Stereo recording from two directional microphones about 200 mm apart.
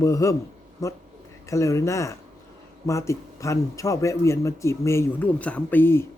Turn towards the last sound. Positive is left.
turn(degrees=10)  # may be behind; listen again after turning